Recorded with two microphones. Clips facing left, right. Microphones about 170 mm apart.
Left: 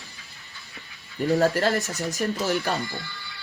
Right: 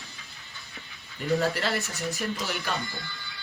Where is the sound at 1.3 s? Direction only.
40° left (ahead or behind).